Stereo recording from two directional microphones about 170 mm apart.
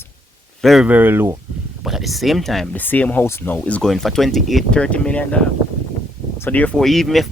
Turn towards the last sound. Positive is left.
turn(degrees=0)  # may be behind; listen again after turning